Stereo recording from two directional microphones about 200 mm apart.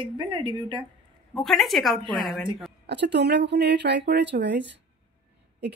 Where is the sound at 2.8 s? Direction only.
60° right (ahead or behind).